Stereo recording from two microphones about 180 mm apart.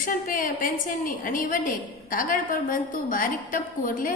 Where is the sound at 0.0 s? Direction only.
50° left (ahead or behind).